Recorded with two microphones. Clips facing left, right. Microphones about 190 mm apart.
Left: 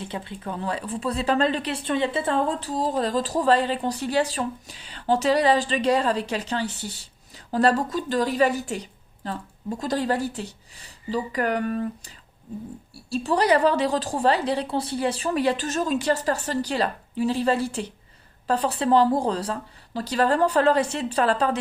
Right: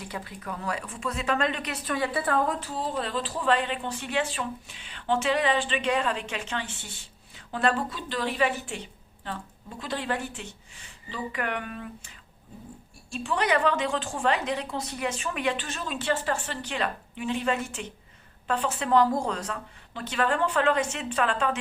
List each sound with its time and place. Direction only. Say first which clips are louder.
0.0 s speech: left 4 dB; 25° left (ahead or behind)